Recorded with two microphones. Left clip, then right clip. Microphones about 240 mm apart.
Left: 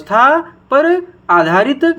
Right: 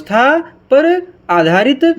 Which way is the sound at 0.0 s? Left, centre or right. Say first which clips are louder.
Left 1 dB; right.